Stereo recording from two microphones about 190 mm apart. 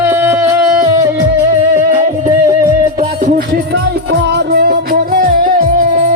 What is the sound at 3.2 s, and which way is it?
Music, 45° right (ahead or behind).